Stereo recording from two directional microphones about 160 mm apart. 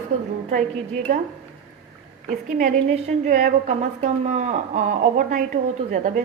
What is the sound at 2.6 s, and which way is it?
A woman's voice, 50° right (ahead or behind).